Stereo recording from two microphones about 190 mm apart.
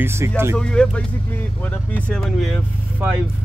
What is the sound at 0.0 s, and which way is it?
Speech, 15° right (ahead or behind).